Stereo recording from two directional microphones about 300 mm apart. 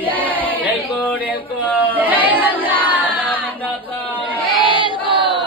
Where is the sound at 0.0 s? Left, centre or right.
Centre.